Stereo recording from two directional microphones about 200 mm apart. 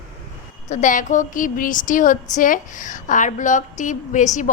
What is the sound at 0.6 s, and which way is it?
Speech, 40° left (ahead or behind).